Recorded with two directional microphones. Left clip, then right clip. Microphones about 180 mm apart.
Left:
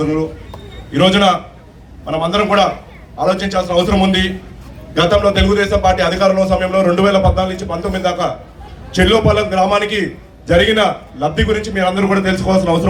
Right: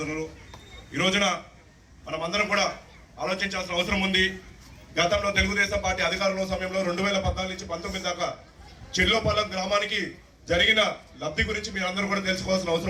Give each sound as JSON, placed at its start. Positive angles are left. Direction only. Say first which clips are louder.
{"t": 0.0, "sound": "a man's voice", "louder": "left 14 dB", "side_deg": 25}